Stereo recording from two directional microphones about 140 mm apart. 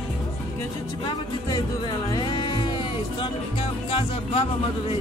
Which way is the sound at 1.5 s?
30° left (ahead or behind).